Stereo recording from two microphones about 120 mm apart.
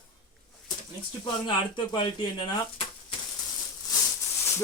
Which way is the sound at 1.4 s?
40° left (ahead or behind).